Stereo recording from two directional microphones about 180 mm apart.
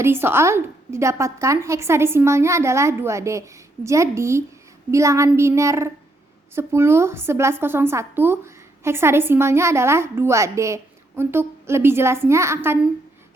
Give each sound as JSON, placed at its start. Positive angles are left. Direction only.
{"t": 0.0, "sound": "a woman's voice", "side_deg": -15}